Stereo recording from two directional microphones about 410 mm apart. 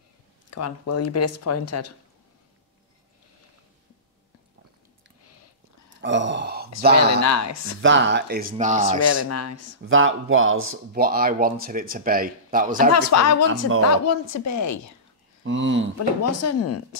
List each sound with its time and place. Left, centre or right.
0.5 s speech: left
5.9 s a sound: right
7.1 s speech: left
7.8 s speech: right
9.0 s speech: left
9.8 s speech: right
12.9 s speech: left
15.4 s speech: right
16.3 s speech: left